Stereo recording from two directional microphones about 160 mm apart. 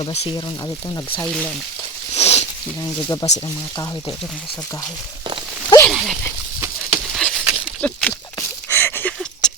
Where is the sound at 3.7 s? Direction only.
25° left (ahead or behind).